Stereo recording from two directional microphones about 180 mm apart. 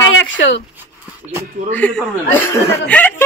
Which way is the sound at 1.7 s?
5° left (ahead or behind).